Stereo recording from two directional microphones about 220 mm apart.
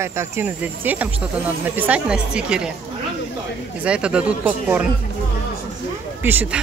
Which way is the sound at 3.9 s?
5° right (ahead or behind).